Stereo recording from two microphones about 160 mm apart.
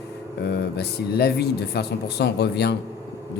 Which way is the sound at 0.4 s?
90° left.